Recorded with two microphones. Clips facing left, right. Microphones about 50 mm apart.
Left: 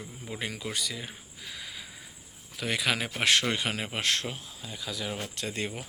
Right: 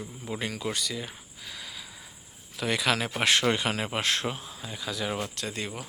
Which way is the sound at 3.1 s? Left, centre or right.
Centre.